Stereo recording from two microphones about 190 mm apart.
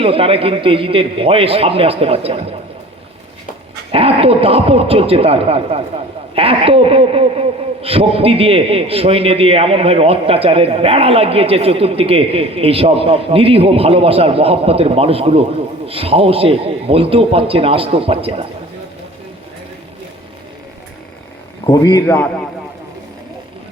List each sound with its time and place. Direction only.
0.0 s a man's voice: 30° right (ahead or behind)
3.9 s a man's voice: 30° right (ahead or behind)
21.7 s a man's voice: 15° left (ahead or behind)